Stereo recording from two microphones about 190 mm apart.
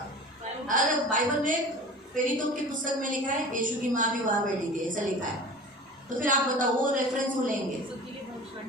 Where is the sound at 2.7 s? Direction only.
45° right (ahead or behind).